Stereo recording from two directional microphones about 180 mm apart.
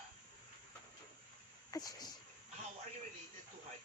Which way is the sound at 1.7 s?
20° left (ahead or behind).